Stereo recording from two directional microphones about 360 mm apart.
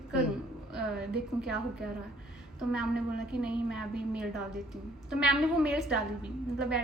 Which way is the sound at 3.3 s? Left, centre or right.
Centre.